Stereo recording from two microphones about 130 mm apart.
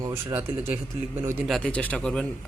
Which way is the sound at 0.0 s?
20° right (ahead or behind).